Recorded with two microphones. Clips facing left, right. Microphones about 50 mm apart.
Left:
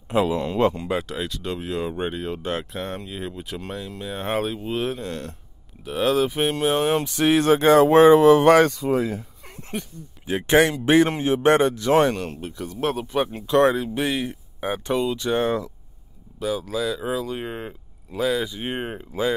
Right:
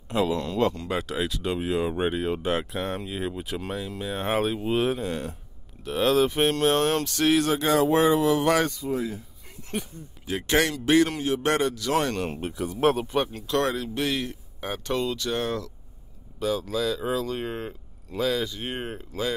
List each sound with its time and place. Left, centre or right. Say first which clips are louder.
0.1 s a man's voice: left 3 dB; centre
0.8 s speech: left 1 dB; centre
5.9 s speech: left 1 dB; centre
7.3 s speech: left 9 dB; left
8.6 s speech: left 6 dB; left
9.7 s speech: left 1 dB; centre
10.2 s a man's voice: left 6 dB; left
12.3 s speech: right 2 dB; right
12.5 s speech: right 3 dB; centre
13.3 s a man's voice: left 7 dB; left
16.3 s speech: left 1 dB; centre